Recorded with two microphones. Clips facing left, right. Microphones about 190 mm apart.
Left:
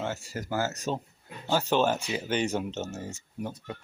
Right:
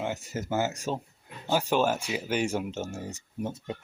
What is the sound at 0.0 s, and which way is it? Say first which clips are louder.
Speech: right 1 dB; 20° right (ahead or behind).